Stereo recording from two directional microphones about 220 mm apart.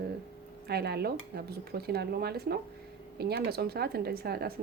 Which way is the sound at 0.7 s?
45° right (ahead or behind).